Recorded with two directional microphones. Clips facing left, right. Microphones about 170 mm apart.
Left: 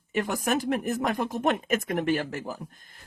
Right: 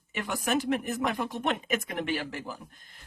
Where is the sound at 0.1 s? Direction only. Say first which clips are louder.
Left 3 dB; 45° left (ahead or behind).